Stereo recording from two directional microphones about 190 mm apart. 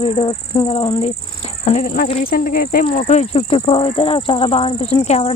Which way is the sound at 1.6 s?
40° left (ahead or behind).